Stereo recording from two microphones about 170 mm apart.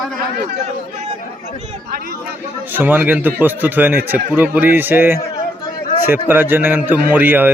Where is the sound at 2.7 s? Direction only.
10° right (ahead or behind).